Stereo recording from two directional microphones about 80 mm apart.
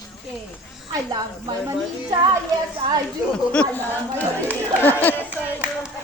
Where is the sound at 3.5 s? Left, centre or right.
Centre.